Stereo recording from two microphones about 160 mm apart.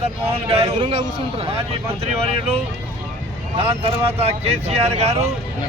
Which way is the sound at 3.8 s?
40° right (ahead or behind).